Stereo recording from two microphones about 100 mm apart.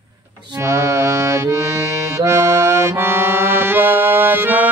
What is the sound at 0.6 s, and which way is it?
Accordion, 30° right (ahead or behind).